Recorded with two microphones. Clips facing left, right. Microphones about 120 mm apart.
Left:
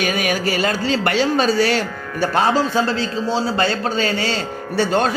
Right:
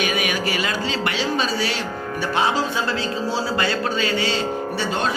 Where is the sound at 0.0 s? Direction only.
40° left (ahead or behind).